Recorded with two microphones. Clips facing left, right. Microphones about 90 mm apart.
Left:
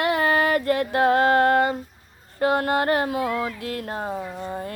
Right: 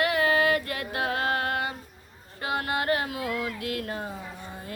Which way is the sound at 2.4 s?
40° left (ahead or behind).